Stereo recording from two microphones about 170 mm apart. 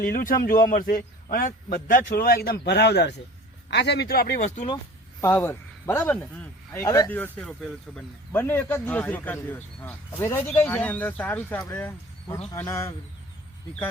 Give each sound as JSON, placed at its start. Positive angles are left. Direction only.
{"t": 0.0, "sound": "a man's voice", "side_deg": 55}
{"t": 4.4, "sound": "speech", "side_deg": 45}
{"t": 5.2, "sound": "speech", "side_deg": 15}
{"t": 6.8, "sound": "speech", "side_deg": 20}
{"t": 7.1, "sound": "speech", "side_deg": 10}